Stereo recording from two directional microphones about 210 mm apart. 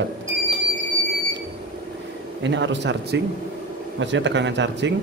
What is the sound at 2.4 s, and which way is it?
Speech, 60° right (ahead or behind).